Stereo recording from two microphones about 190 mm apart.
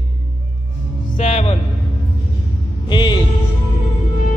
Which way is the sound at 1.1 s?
35° left (ahead or behind).